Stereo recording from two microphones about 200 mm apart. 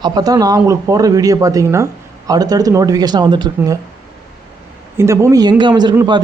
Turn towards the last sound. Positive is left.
turn(degrees=-20)  # may be behind; listen again after turning